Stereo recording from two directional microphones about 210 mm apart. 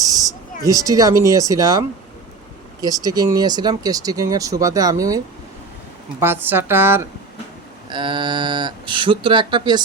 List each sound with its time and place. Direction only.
0.0 s speech: 15° right (ahead or behind)
2.8 s speech: 20° right (ahead or behind)
7.9 s speech: 20° right (ahead or behind)